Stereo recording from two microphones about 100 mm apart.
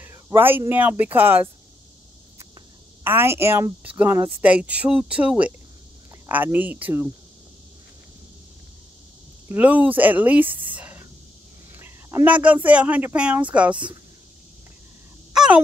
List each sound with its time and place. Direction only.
0.0 s speech: 25° right (ahead or behind)
3.0 s speech: 20° right (ahead or behind)
3.8 s speech: 15° right (ahead or behind)
9.5 s speech: 15° right (ahead or behind)
11.7 s a sound: 25° right (ahead or behind)
12.3 s speech: 15° right (ahead or behind)
15.3 s a sound: 5° right (ahead or behind)